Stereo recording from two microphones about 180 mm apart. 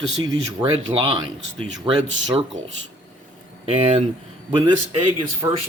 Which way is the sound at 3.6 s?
35° right (ahead or behind).